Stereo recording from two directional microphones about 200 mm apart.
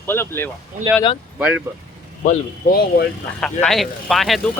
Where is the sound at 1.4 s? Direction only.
5° right (ahead or behind).